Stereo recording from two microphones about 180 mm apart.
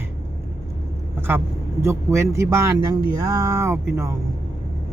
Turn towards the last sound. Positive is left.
turn(degrees=-15)  # may be behind; listen again after turning